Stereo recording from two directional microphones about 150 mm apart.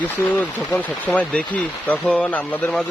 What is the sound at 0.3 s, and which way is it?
Speech, 10° left (ahead or behind).